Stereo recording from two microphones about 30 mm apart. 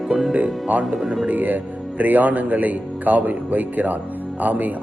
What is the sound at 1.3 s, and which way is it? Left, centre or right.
Speech, right.